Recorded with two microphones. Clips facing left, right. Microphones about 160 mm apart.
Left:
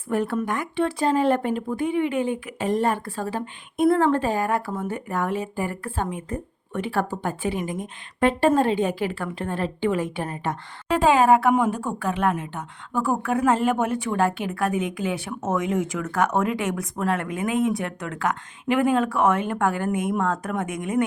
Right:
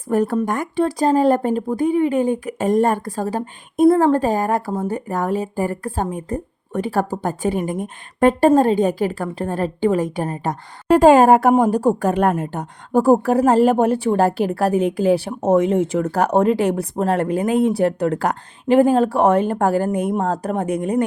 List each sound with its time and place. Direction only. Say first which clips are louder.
0.1 s a woman's voice: right 6 dB; 40° right (ahead or behind)